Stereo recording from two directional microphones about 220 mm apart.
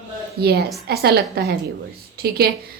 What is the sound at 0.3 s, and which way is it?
A woman's voice, 45° right (ahead or behind).